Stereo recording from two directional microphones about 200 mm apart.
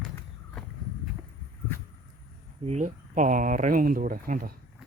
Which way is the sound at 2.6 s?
35° right (ahead or behind).